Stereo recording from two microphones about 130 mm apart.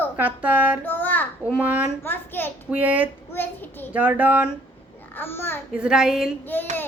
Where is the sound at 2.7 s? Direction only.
10° right (ahead or behind).